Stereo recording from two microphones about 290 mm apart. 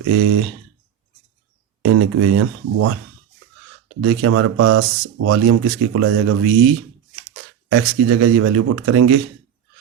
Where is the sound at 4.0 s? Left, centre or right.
Right.